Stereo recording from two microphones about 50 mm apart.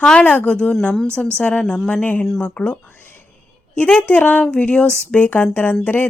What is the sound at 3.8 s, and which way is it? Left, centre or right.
Speech, left.